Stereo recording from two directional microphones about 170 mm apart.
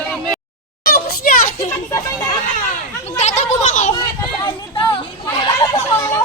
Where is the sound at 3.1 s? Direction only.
45° left (ahead or behind).